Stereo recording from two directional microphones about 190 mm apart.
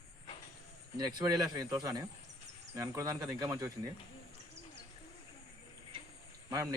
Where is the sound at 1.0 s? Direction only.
20° right (ahead or behind).